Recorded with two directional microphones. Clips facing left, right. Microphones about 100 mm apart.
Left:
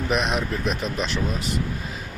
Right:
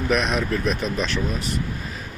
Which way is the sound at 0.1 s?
35° left (ahead or behind).